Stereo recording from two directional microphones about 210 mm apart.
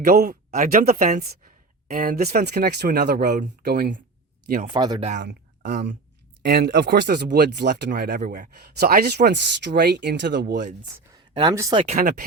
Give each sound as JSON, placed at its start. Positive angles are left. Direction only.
{"t": 0.0, "sound": "speech", "side_deg": -40}
{"t": 4.7, "sound": "speech", "side_deg": -20}
{"t": 5.2, "sound": "speech", "side_deg": -50}
{"t": 11.1, "sound": "speech", "side_deg": -20}
{"t": 11.9, "sound": "speech", "side_deg": -35}